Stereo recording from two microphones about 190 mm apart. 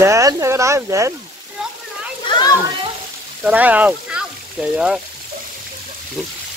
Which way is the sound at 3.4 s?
10° right (ahead or behind).